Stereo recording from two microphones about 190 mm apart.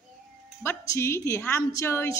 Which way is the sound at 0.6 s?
15° left (ahead or behind).